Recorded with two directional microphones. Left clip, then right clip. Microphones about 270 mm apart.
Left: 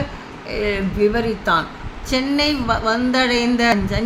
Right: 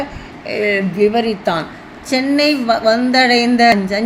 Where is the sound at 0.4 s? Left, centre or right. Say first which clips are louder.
Right 6 dB; centre.